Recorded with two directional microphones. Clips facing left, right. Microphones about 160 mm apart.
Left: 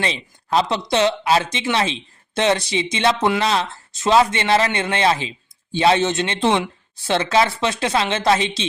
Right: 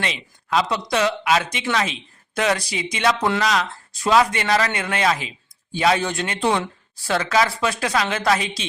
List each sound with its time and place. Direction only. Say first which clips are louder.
0.0 s speech: left 3 dB; 30° left (ahead or behind)